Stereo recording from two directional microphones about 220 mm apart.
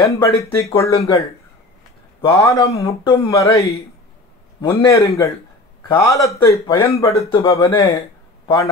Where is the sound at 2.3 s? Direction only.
15° left (ahead or behind).